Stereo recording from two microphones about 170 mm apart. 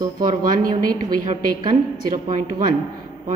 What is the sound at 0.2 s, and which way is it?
A woman's voice, 55° right (ahead or behind).